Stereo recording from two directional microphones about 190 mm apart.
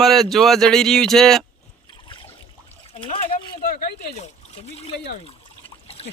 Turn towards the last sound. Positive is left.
turn(degrees=30)  # may be behind; listen again after turning